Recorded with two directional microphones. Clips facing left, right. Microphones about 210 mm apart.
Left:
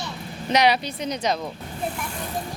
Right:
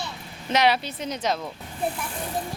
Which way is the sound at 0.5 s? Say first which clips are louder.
Left 2 dB; centre (ahead or behind).